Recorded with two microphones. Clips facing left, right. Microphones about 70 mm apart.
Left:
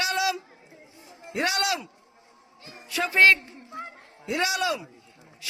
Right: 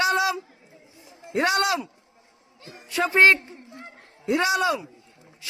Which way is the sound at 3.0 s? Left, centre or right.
Right.